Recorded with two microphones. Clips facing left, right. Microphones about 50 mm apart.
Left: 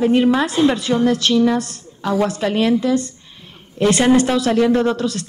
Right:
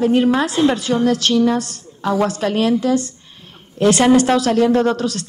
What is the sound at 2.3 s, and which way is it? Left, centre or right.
A woman's voice, centre.